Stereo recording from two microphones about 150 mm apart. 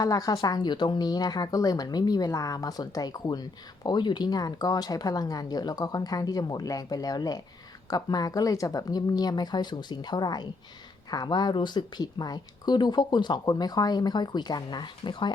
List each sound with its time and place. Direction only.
0.0 s speech: 25° left (ahead or behind)